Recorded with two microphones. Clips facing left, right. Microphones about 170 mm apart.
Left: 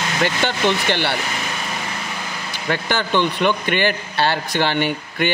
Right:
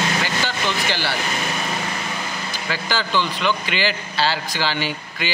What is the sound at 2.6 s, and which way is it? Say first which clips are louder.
Speech: left 4 dB; 60° left (ahead or behind).